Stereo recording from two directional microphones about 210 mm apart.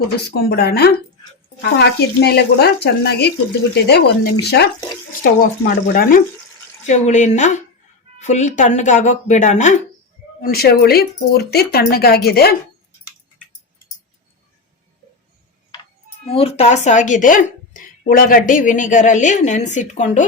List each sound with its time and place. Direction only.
0.3 s a woman's voice: 50° left (ahead or behind)
10.4 s speech: 45° left (ahead or behind)
15.7 s a woman's voice: 25° left (ahead or behind)